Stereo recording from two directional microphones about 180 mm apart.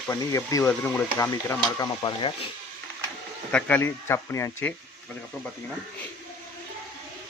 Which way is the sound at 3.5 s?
10° left (ahead or behind).